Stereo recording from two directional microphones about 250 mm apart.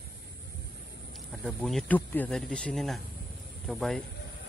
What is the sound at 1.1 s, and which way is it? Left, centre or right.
Speech, centre.